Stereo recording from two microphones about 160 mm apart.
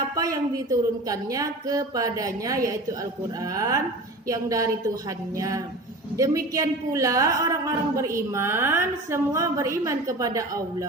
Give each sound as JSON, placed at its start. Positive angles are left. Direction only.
{"t": 0.2, "sound": "a woman's voice", "side_deg": -20}